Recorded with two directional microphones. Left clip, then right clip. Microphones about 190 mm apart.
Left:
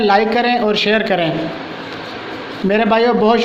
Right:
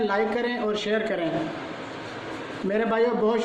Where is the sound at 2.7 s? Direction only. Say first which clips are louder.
Left 10 dB; 40° left (ahead or behind).